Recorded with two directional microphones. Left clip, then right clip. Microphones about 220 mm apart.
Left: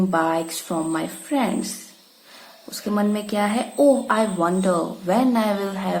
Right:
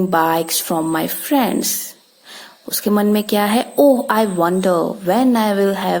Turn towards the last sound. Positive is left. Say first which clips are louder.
# right 7 dB
turn(degrees=-40)  # may be behind; listen again after turning